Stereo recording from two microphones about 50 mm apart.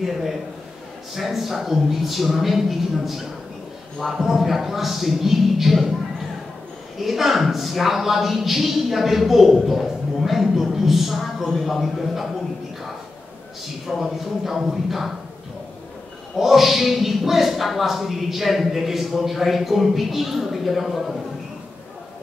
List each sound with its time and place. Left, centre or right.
0.0 s a man's voice: centre
7.0 s a man's voice: centre
13.8 s a man's voice: centre
16.3 s a man's voice: centre